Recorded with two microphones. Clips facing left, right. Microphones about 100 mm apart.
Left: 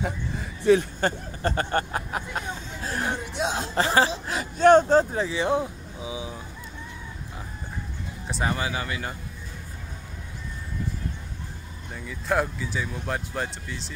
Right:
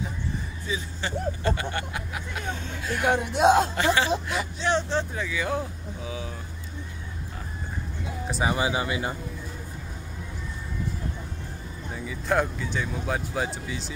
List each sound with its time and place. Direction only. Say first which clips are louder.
0.0 s a sound: left 2 dB; 65° left (ahead or behind)
1.4 s a sound: left 3 dB; 45° left (ahead or behind)
3.1 s speech: right 12 dB; 55° right (ahead or behind)
3.7 s speech: left 2 dB; 35° left (ahead or behind)
4.3 s speech: left 9 dB; 45° left (ahead or behind); by 6.3 s 15° left (ahead or behind)
8.3 s speech: right 1 dB; 5° right (ahead or behind)
8.5 s speech: right 3 dB; 15° right (ahead or behind)
11.9 s speech: even; centre (ahead or behind)